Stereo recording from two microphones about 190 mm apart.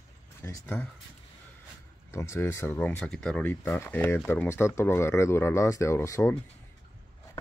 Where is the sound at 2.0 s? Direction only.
15° left (ahead or behind).